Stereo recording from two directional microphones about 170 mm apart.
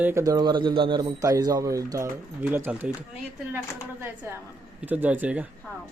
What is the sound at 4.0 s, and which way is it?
Speech, 15° right (ahead or behind).